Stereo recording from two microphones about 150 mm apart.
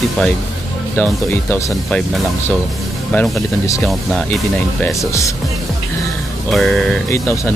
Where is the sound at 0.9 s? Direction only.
10° left (ahead or behind).